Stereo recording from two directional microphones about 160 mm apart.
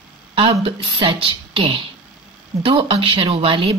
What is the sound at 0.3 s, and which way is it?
Speech, 35° right (ahead or behind).